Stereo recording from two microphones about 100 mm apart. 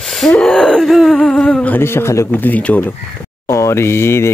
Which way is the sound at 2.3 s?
15° left (ahead or behind).